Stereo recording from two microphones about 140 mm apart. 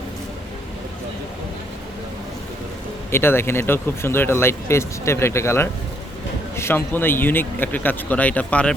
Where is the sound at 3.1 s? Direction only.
15° left (ahead or behind).